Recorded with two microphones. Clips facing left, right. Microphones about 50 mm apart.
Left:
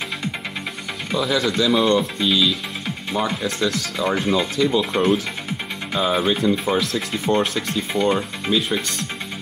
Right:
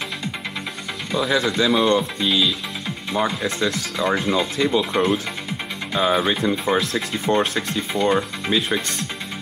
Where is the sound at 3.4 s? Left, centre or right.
Right.